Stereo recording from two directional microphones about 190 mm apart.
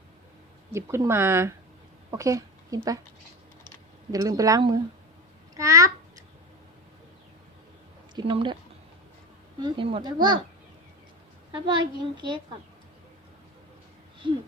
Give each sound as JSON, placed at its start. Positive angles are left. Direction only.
{"t": 0.7, "sound": "speech", "side_deg": -15}
{"t": 4.1, "sound": "speech", "side_deg": -20}
{"t": 8.1, "sound": "speech", "side_deg": -25}
{"t": 9.6, "sound": "speech", "side_deg": -25}
{"t": 11.5, "sound": "speech", "side_deg": -25}